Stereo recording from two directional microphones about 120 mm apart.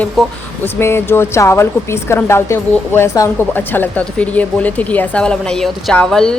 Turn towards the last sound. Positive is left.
turn(degrees=5)  # may be behind; listen again after turning